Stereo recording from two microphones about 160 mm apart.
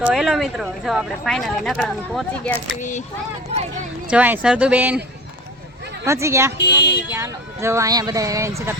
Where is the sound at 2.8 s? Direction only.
50° left (ahead or behind).